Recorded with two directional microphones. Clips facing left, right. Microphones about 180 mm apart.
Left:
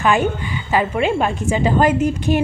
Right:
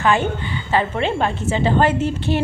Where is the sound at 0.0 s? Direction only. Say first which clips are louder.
Left 1 dB; 15° left (ahead or behind).